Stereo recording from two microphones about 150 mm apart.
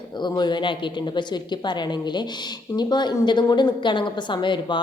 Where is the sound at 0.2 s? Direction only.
30° left (ahead or behind).